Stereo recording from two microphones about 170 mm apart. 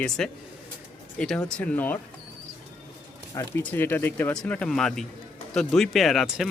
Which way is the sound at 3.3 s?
15° left (ahead or behind).